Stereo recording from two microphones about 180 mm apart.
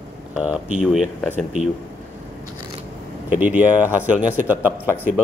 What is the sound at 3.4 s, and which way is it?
Speech, 10° right (ahead or behind).